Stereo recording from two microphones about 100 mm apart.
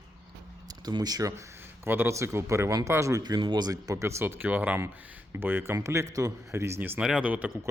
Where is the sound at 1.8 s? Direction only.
20° right (ahead or behind).